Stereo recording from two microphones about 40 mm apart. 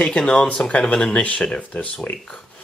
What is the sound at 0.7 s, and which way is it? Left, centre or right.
Speech, left.